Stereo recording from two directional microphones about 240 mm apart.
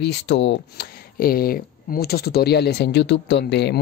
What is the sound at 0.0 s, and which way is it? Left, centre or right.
Speech, left.